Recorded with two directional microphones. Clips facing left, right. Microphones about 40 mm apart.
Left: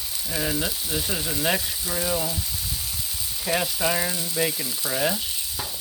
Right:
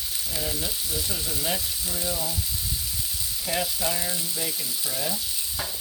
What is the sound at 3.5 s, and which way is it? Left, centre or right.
Speech, left.